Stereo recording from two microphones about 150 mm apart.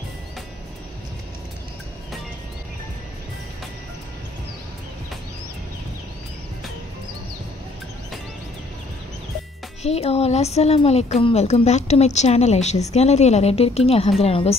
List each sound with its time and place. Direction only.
9.8 s a woman's voice: 45° left (ahead or behind)